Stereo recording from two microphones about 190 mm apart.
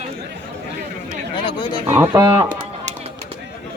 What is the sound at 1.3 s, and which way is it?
Oink, 25° left (ahead or behind).